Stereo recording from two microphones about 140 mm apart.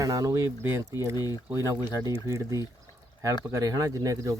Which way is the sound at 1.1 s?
25° left (ahead or behind).